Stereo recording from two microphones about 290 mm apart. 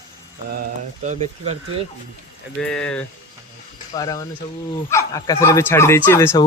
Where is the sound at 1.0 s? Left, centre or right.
Right.